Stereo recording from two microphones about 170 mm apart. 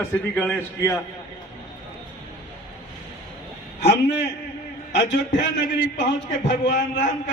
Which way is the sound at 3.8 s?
80° left.